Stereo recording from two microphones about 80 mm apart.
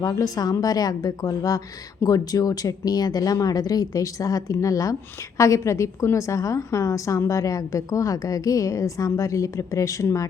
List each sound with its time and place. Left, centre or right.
0.0 s a woman's voice: left